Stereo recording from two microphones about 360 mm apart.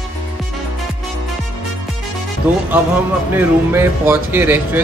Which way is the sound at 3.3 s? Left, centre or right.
Centre.